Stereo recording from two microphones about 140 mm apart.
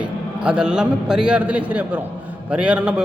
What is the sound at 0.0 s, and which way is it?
A man's voice, 5° right (ahead or behind).